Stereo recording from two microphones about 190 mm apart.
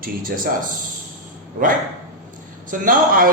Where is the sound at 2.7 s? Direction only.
45° right (ahead or behind).